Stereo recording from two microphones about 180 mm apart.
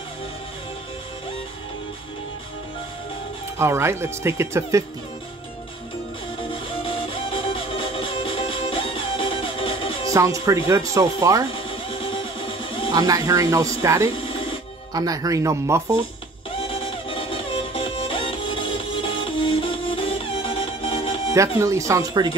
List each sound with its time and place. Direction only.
3.5 s speech: 15° right (ahead or behind)
6.5 s music: 30° left (ahead or behind)
10.1 s speech: 15° right (ahead or behind)
11.5 s music: 30° left (ahead or behind)
12.9 s speech: 20° right (ahead or behind)
16.5 s music: 30° left (ahead or behind)
21.5 s speech: 15° right (ahead or behind)